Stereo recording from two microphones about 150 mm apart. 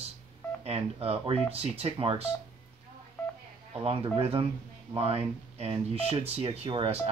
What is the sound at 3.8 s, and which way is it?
Speech, 40° right (ahead or behind).